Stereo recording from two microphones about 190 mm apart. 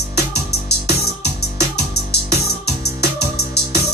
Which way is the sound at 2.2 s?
60° left (ahead or behind).